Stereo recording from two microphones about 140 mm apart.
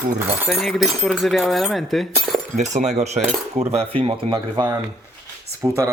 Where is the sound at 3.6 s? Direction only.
45° right (ahead or behind).